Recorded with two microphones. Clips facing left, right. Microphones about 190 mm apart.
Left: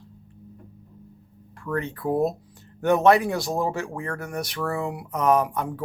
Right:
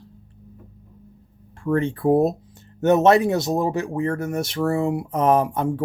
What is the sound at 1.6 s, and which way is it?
Speech, 25° right (ahead or behind).